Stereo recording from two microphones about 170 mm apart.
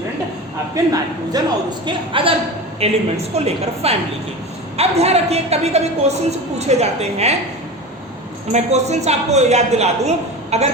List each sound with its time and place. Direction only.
0.8 s a woman's voice: 20° right (ahead or behind); by 7.3 s 40° right (ahead or behind)
8.5 s a woman's voice: 40° right (ahead or behind)